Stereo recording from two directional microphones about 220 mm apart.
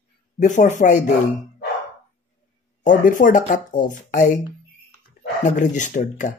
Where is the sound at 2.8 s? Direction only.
35° left (ahead or behind).